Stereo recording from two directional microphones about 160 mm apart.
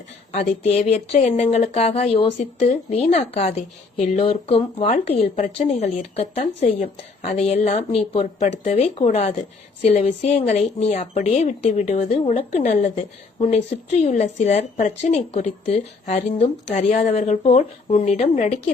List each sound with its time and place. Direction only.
0.3 s speech: 40° left (ahead or behind)